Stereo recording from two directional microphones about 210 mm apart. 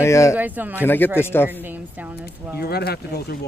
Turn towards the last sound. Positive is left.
turn(degrees=50)  # may be behind; listen again after turning